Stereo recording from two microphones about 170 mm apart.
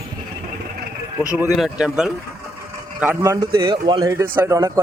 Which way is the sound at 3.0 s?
15° right (ahead or behind).